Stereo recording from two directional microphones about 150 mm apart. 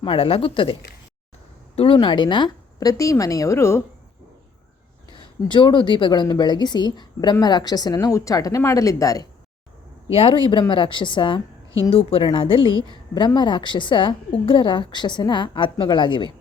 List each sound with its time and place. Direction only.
0.0 s a woman's voice: 35° left (ahead or behind); by 3.8 s 15° left (ahead or behind)
5.4 s speech: 30° left (ahead or behind)
10.1 s a woman's voice: 40° left (ahead or behind)